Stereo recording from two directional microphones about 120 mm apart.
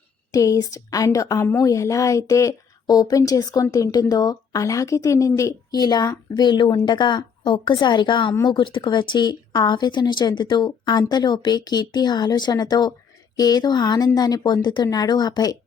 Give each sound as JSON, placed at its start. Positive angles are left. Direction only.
{"t": 0.3, "sound": "a woman's voice", "side_deg": 25}